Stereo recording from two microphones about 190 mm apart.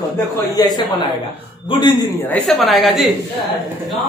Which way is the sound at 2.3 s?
Centre (ahead or behind).